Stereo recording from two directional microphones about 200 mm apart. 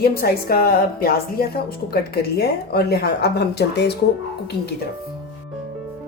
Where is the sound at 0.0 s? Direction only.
50° left (ahead or behind).